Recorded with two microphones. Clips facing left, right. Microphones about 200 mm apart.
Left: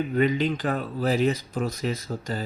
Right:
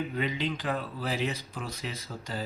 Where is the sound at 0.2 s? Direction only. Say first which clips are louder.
Left 12 dB; 45° left (ahead or behind).